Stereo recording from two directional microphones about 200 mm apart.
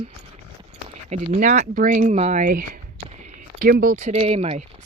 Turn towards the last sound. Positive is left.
turn(degrees=-35)  # may be behind; listen again after turning